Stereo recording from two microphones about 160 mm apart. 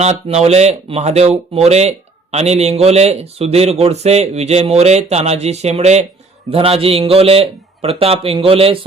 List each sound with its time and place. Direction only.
0.0 s a man's voice: 40° right (ahead or behind)